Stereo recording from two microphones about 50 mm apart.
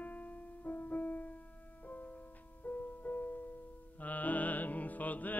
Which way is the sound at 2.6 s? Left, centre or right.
Left.